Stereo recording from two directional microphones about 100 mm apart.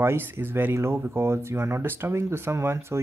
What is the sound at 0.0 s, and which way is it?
Speech, 20° right (ahead or behind).